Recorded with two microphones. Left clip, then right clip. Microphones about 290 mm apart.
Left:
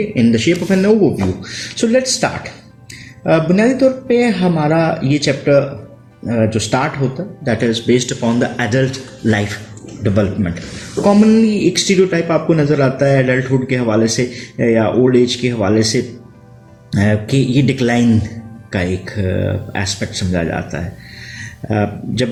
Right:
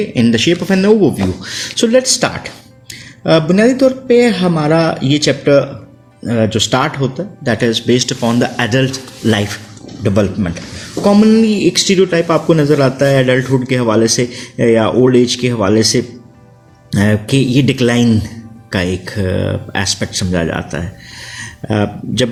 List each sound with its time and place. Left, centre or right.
0.1 s speech: right